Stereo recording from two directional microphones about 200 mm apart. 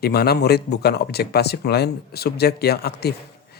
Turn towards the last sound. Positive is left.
turn(degrees=55)  # may be behind; listen again after turning